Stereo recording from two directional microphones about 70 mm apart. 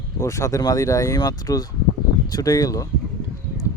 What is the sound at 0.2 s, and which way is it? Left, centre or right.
Speech, left.